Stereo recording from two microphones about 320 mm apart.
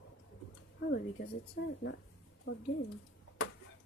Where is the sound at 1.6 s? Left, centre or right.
Left.